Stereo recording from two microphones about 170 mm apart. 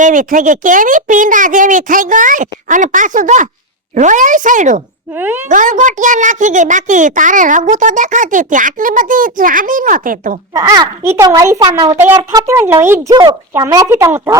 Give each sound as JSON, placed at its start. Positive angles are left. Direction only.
{"t": 0.0, "sound": "a child's voice", "side_deg": -50}
{"t": 5.1, "sound": "a child's voice", "side_deg": -15}
{"t": 5.5, "sound": "a child's voice", "side_deg": -50}
{"t": 10.5, "sound": "a child's voice", "side_deg": -20}